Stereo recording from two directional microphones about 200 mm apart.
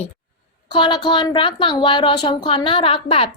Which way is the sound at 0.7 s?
20° left (ahead or behind).